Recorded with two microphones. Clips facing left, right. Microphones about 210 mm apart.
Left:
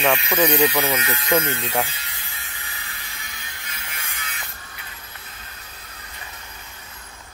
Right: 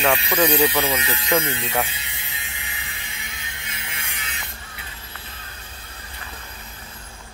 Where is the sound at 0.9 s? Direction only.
30° right (ahead or behind).